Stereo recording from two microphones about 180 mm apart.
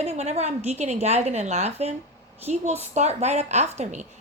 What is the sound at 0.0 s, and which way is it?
A woman's voice, 35° right (ahead or behind).